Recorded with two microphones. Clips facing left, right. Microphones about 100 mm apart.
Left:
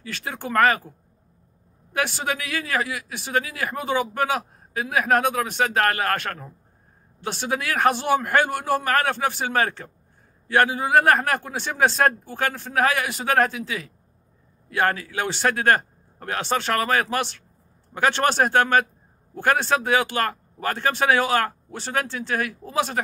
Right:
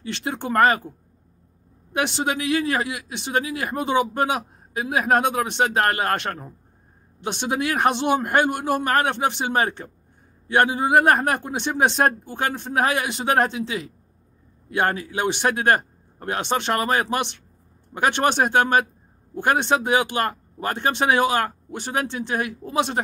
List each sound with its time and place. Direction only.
0.0 s speech: 25° right (ahead or behind)
1.9 s speech: 20° right (ahead or behind)